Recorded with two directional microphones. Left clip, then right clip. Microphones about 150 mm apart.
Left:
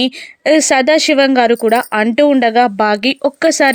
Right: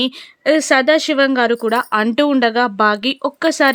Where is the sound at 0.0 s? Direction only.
20° left (ahead or behind).